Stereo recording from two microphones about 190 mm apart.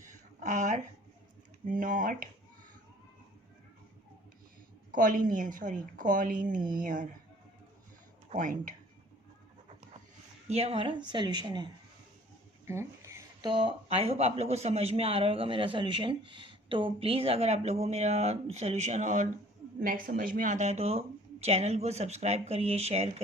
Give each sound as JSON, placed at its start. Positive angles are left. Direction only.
{"t": 0.0, "sound": "a sound", "side_deg": -40}
{"t": 1.6, "sound": "a woman's voice", "side_deg": -45}
{"t": 4.9, "sound": "a woman's voice", "side_deg": -45}
{"t": 8.3, "sound": "a woman's voice", "side_deg": -45}
{"t": 10.5, "sound": "speech", "side_deg": -30}
{"t": 12.6, "sound": "a sound", "side_deg": -15}
{"t": 13.5, "sound": "a woman's voice", "side_deg": -25}